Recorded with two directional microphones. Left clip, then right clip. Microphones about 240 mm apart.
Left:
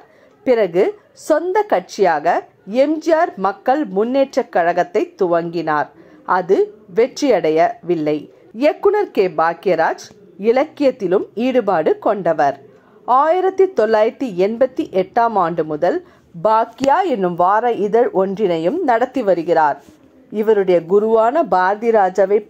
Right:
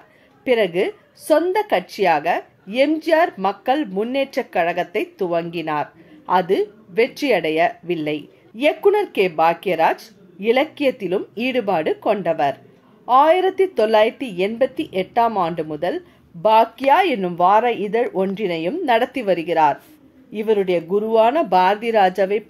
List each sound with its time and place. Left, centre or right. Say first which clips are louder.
0.4 s a woman's voice: left 3 dB; centre
17.0 s a woman's voice: left 1 dB; centre
20.9 s a woman's voice: even; centre
21.5 s speech: left 2 dB; centre